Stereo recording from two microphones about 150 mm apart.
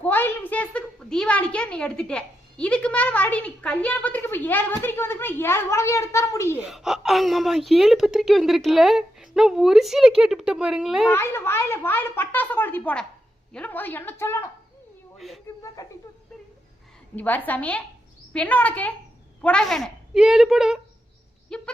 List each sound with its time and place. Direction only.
0.0 s a woman's voice: 10° left (ahead or behind)
6.6 s a woman's voice: centre (ahead or behind)
11.1 s speech: 15° left (ahead or behind)
15.6 s speech: 25° left (ahead or behind)
17.2 s a woman's voice: 10° left (ahead or behind)